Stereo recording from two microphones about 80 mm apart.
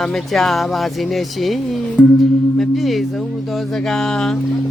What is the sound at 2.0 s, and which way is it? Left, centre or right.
Music, centre.